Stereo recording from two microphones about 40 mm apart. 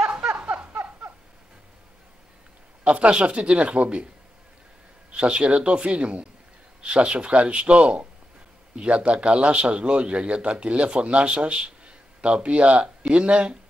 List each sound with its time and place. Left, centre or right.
0.2 s a sound: right
2.8 s a man's voice: right
5.1 s a man's voice: right